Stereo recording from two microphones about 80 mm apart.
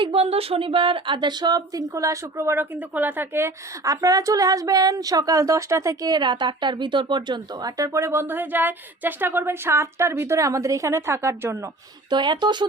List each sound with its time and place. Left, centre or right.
0.8 s speech: right
2.7 s speech: right
3.8 s a woman's voice: right
6.1 s speech: right
7.8 s speech: right
12.1 s speech: right